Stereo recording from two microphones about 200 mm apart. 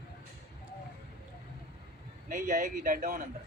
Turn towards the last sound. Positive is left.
turn(degrees=-40)  # may be behind; listen again after turning